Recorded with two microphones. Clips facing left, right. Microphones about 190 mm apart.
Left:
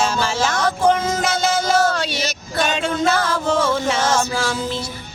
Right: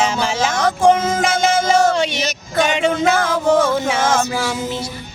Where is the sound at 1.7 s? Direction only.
20° right (ahead or behind).